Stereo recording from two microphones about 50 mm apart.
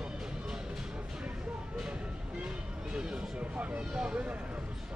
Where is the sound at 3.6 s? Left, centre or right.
Right.